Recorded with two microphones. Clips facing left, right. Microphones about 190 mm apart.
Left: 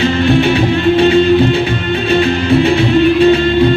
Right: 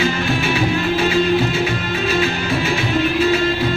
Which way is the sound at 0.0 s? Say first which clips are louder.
Left 8 dB; 30° left (ahead or behind).